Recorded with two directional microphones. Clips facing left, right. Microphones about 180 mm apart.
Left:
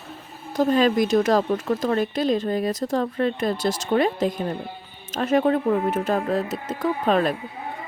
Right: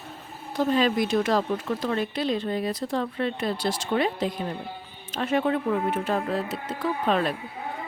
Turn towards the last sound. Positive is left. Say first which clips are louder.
# left 4 dB
turn(degrees=45)  # may be behind; listen again after turning